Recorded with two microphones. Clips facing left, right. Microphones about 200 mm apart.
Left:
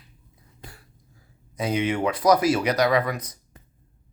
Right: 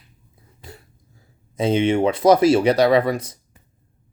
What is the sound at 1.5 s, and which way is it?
Speech, 25° right (ahead or behind).